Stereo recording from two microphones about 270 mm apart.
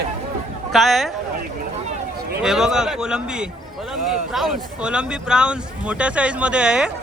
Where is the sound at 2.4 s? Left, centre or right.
Centre.